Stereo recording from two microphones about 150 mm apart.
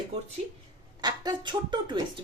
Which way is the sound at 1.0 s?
30° right (ahead or behind).